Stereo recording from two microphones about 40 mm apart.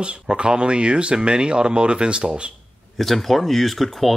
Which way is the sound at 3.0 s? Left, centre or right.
Centre.